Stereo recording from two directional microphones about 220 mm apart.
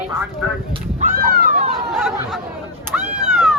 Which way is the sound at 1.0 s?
40° right (ahead or behind).